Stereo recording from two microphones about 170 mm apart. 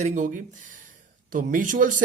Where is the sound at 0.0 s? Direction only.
45° right (ahead or behind).